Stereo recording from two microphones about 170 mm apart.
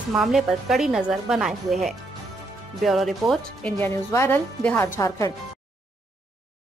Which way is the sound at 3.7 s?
15° left (ahead or behind).